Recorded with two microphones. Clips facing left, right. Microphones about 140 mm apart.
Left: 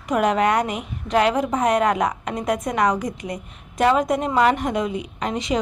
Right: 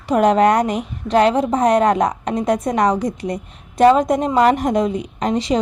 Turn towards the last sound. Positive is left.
turn(degrees=-35)  # may be behind; listen again after turning